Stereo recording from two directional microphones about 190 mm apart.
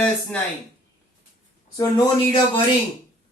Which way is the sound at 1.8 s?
25° left (ahead or behind).